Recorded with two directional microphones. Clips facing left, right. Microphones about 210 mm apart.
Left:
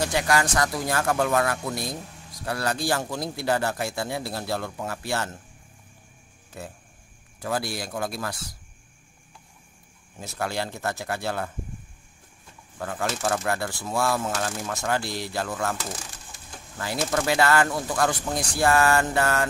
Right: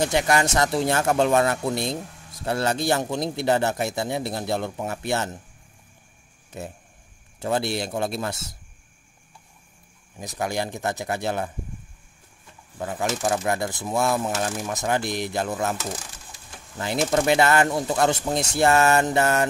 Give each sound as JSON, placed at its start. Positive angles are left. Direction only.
{"t": 0.0, "sound": "speech", "side_deg": -20}
{"t": 6.5, "sound": "speech", "side_deg": -20}
{"t": 10.1, "sound": "speech", "side_deg": -15}
{"t": 12.7, "sound": "speech", "side_deg": -15}